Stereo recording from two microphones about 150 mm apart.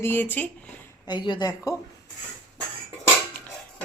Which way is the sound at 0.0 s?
15° left (ahead or behind).